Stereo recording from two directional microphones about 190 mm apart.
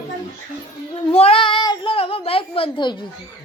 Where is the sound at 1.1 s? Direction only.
30° left (ahead or behind).